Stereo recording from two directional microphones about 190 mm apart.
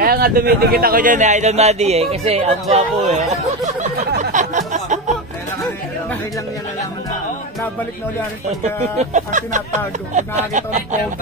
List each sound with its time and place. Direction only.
0.0 s speech: 50° right (ahead or behind)
4.2 s a sound: 40° right (ahead or behind)
8.9 s speech: 40° right (ahead or behind)